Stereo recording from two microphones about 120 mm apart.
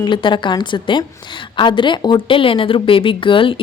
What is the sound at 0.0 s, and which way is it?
A woman's voice, 40° left (ahead or behind).